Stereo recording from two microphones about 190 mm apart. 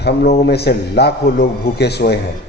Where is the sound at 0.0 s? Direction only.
60° left (ahead or behind).